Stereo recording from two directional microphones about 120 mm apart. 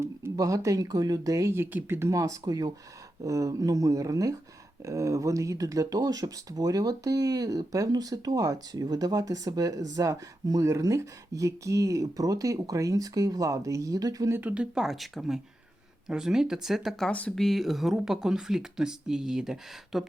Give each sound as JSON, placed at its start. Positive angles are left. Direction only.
{"t": 0.0, "sound": "speech", "side_deg": -25}
{"t": 17.1, "sound": "speech", "side_deg": 10}